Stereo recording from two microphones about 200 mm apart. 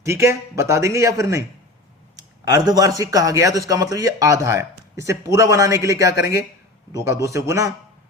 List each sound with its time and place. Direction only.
0.0 s a man's voice: 15° right (ahead or behind)